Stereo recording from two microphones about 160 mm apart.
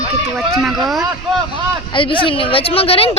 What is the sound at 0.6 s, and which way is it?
Speech, centre (ahead or behind).